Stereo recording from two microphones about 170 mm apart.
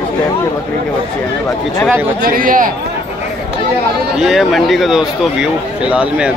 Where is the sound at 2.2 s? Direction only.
55° right (ahead or behind).